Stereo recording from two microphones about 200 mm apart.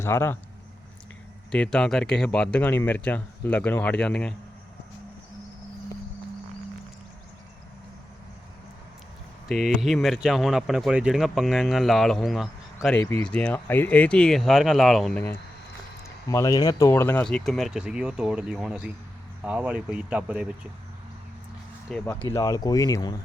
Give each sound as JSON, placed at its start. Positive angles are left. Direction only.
{"t": 0.0, "sound": "speech", "side_deg": 10}
{"t": 1.5, "sound": "speech", "side_deg": 5}
{"t": 9.5, "sound": "speech", "side_deg": 0}
{"t": 21.8, "sound": "speech", "side_deg": 10}